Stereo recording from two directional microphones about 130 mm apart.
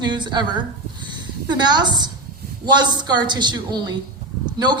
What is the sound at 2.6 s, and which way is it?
A woman's voice, 35° right (ahead or behind).